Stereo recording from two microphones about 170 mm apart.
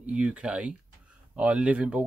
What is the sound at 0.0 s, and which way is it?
Speech, 5° right (ahead or behind).